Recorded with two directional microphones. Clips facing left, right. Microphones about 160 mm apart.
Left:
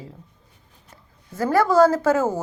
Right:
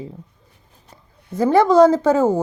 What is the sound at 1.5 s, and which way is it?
Speech, 20° right (ahead or behind).